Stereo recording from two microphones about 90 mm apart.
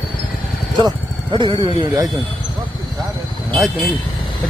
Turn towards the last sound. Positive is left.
turn(degrees=10)  # may be behind; listen again after turning